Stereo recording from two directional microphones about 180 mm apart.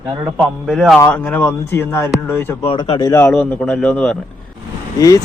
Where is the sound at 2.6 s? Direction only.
30° left (ahead or behind).